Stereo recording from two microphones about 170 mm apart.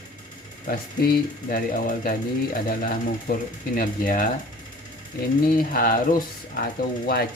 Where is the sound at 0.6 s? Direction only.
60° left (ahead or behind).